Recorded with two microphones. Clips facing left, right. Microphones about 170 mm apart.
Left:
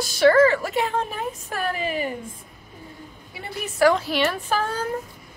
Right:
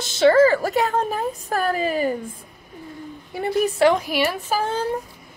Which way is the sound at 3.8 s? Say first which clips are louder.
Left 2 dB; 15° right (ahead or behind).